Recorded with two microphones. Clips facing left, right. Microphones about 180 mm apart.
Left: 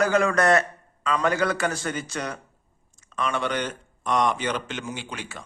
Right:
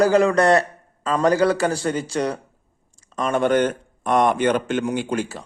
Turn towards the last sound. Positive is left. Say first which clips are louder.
# right 11 dB
turn(degrees=-50)  # may be behind; listen again after turning